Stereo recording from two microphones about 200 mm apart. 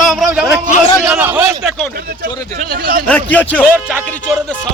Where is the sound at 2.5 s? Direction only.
50° right (ahead or behind).